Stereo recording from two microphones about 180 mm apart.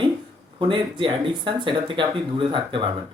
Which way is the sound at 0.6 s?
30° right (ahead or behind).